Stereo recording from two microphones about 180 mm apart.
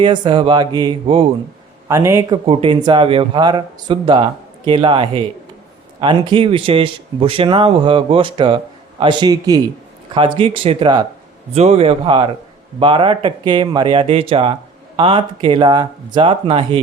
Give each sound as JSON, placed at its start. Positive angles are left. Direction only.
{"t": 0.0, "sound": "a man's voice", "side_deg": -25}
{"t": 1.9, "sound": "speech", "side_deg": -15}
{"t": 2.3, "sound": "a man's voice", "side_deg": -30}